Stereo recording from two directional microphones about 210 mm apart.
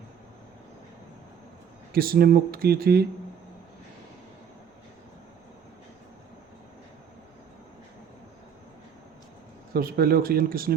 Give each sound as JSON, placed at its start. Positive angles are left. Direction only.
{"t": 1.9, "sound": "speech", "side_deg": -45}
{"t": 9.7, "sound": "speech", "side_deg": -45}